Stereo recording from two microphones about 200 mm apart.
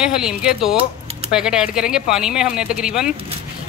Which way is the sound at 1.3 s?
5° right (ahead or behind).